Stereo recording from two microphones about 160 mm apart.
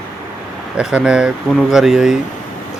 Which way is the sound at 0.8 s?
5° right (ahead or behind).